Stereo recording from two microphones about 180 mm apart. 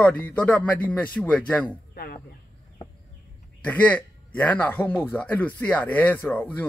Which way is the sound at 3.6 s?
10° left (ahead or behind).